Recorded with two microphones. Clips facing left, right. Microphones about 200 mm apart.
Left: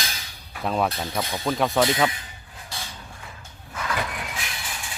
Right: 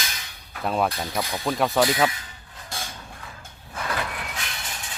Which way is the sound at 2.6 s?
50° right (ahead or behind).